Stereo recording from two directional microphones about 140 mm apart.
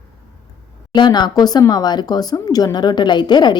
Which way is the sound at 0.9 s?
30° left (ahead or behind).